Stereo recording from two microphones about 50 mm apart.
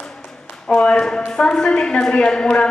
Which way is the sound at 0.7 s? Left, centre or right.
Left.